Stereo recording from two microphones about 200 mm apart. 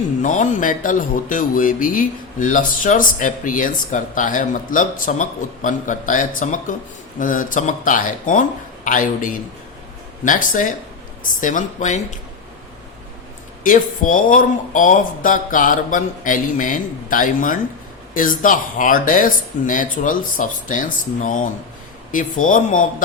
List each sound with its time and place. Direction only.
0.2 s speech: 40° left (ahead or behind)
13.7 s speech: 40° left (ahead or behind)